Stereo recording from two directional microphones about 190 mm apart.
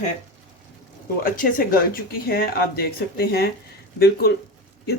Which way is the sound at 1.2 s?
45° left (ahead or behind).